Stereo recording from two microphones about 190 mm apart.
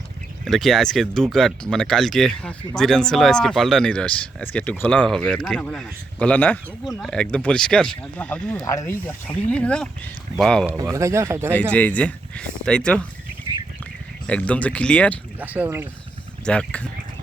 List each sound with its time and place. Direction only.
0.4 s speech: centre (ahead or behind)
10.8 s speech: 15° right (ahead or behind)
11.7 s speech: 5° left (ahead or behind)
14.3 s speech: 5° left (ahead or behind)
15.4 s speech: 10° right (ahead or behind)
16.5 s speech: 5° left (ahead or behind)